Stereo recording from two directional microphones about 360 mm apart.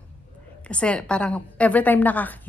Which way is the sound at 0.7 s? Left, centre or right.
Centre.